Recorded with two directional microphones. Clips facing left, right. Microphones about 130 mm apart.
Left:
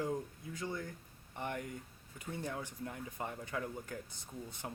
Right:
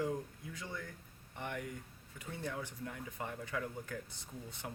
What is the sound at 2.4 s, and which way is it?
Speech, 25° left (ahead or behind).